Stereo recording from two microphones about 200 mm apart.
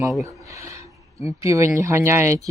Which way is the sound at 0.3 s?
15° right (ahead or behind).